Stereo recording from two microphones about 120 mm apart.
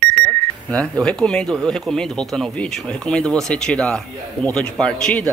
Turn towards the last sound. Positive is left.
turn(degrees=10)  # may be behind; listen again after turning